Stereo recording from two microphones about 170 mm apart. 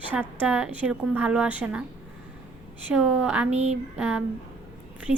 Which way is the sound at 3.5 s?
40° right (ahead or behind).